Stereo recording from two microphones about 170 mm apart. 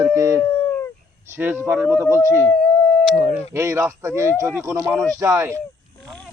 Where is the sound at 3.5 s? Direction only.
15° right (ahead or behind).